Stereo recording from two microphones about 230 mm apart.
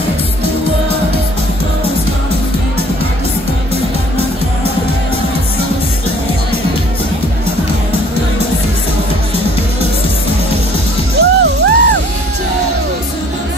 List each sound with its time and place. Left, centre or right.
11.1 s music: right